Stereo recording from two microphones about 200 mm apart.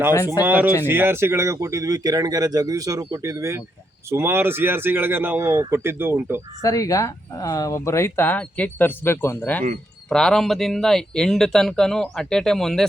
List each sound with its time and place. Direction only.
0.4 s speech: 10° right (ahead or behind)
6.6 s speech: 15° left (ahead or behind)